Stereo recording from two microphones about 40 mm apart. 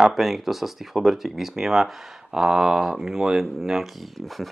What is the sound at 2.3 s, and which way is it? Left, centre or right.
Speech, centre.